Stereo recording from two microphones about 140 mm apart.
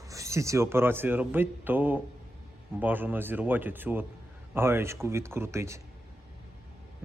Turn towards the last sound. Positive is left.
turn(degrees=-20)  # may be behind; listen again after turning